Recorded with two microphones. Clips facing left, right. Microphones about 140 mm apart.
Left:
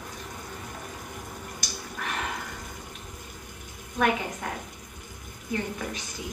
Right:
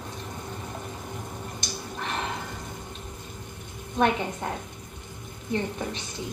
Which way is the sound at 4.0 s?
30° right (ahead or behind).